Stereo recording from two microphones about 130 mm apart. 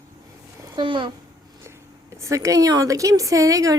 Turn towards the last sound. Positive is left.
turn(degrees=-25)  # may be behind; listen again after turning